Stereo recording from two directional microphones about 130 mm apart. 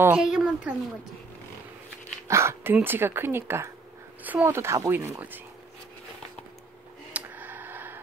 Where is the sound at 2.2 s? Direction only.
20° right (ahead or behind).